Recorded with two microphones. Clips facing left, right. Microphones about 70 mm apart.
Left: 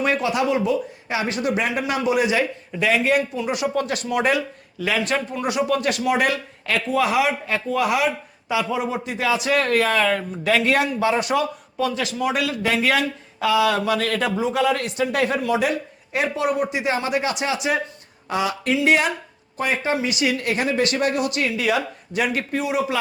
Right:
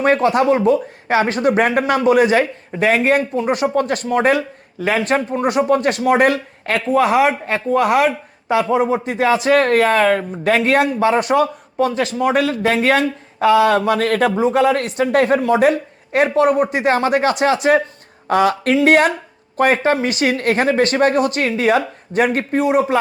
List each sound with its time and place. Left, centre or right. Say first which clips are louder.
0.0 s speech: right 7 dB; right